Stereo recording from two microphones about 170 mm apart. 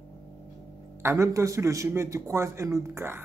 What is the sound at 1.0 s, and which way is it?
A man's voice, 15° right (ahead or behind).